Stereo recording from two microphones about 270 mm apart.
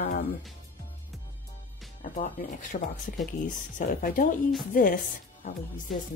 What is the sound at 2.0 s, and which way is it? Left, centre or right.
Speech, left.